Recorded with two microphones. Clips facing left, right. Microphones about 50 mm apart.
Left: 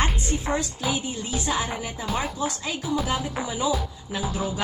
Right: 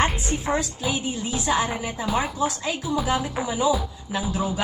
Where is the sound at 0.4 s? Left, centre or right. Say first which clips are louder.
Right 2 dB; centre.